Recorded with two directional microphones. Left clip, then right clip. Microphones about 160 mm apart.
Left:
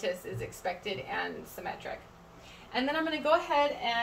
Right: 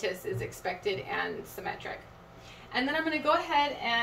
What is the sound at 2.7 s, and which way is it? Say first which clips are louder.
Speech: right 1 dB; 15° right (ahead or behind).